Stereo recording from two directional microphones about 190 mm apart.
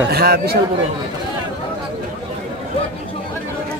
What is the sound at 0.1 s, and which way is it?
Speech, 55° right (ahead or behind).